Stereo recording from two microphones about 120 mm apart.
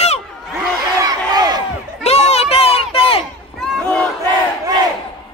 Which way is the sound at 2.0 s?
60° left (ahead or behind).